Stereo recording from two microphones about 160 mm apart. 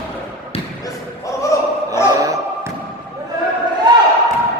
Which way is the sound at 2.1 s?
20° right (ahead or behind).